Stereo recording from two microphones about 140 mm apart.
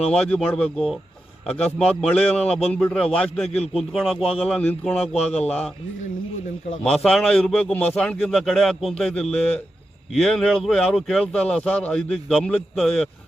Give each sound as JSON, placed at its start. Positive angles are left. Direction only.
{"t": 0.1, "sound": "a man's voice", "side_deg": 5}
{"t": 3.5, "sound": "a man's voice", "side_deg": 50}
{"t": 3.9, "sound": "a man's voice", "side_deg": 0}
{"t": 5.3, "sound": "a man's voice", "side_deg": 50}
{"t": 6.8, "sound": "speech", "side_deg": 5}